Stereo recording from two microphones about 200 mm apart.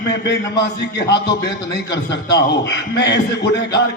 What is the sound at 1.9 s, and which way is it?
A man's voice, 60° left (ahead or behind).